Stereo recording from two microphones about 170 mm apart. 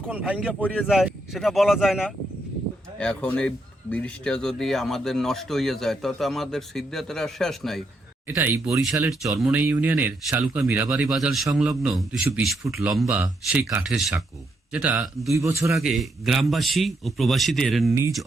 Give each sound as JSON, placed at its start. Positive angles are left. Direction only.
{"t": 0.1, "sound": "speech", "side_deg": -5}
{"t": 8.4, "sound": "speech", "side_deg": -10}
{"t": 15.4, "sound": "speech", "side_deg": -20}
{"t": 15.8, "sound": "speech", "side_deg": 0}